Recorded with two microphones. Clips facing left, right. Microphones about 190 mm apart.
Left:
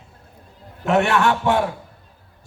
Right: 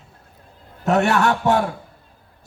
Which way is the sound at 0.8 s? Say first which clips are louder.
Even; 40° right (ahead or behind).